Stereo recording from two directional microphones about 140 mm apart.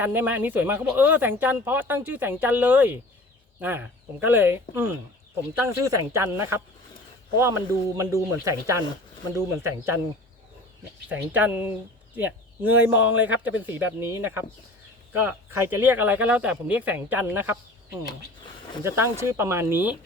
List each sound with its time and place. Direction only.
0.0 s speech: 15° right (ahead or behind)
11.1 s speech: 10° right (ahead or behind)
18.8 s speech: 20° right (ahead or behind)